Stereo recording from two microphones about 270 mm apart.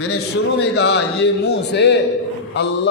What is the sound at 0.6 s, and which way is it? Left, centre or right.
A man's voice, left.